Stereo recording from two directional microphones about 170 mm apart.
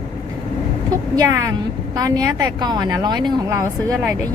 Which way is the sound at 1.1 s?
20° right (ahead or behind).